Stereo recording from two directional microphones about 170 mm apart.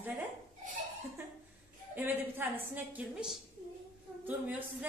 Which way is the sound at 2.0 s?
10° right (ahead or behind).